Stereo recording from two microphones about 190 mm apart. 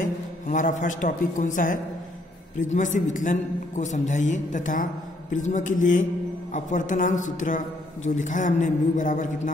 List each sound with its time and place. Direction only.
0.0 s a man's voice: 40° left (ahead or behind)